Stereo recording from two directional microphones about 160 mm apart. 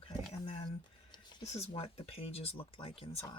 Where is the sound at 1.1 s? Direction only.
20° left (ahead or behind).